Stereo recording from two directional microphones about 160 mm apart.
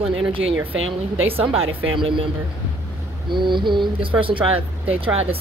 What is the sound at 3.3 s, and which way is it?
Mantra, 30° right (ahead or behind).